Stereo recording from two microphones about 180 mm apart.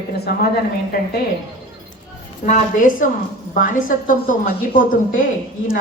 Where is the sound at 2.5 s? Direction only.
45° left (ahead or behind).